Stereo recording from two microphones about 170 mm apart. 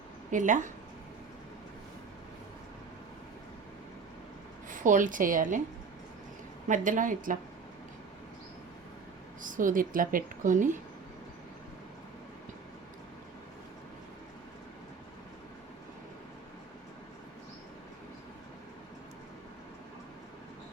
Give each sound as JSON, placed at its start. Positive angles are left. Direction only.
{"t": 0.3, "sound": "speech", "side_deg": -50}
{"t": 4.7, "sound": "speech", "side_deg": -50}
{"t": 6.7, "sound": "speech", "side_deg": -50}
{"t": 9.4, "sound": "speech", "side_deg": -50}